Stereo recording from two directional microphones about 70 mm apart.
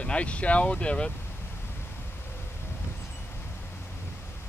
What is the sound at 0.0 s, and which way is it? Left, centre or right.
Speech, centre.